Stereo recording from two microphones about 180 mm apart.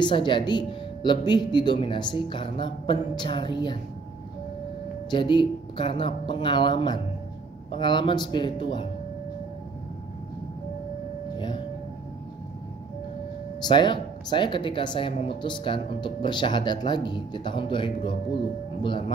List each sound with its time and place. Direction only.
0.0 s speech: 25° left (ahead or behind)
5.1 s speech: 25° left (ahead or behind)
13.6 s speech: 25° left (ahead or behind)